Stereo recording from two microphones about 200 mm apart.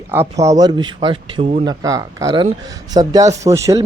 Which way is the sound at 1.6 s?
15° right (ahead or behind).